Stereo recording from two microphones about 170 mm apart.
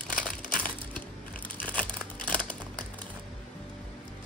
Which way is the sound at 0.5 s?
55° left (ahead or behind).